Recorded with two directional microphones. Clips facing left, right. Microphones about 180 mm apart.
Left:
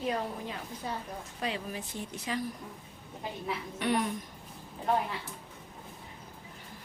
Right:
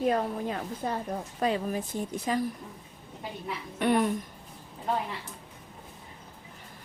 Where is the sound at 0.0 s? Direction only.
50° right (ahead or behind).